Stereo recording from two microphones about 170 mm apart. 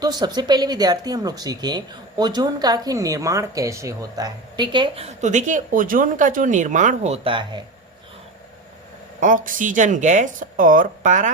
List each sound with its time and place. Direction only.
0.0 s speech: 25° right (ahead or behind)
9.2 s speech: 50° right (ahead or behind)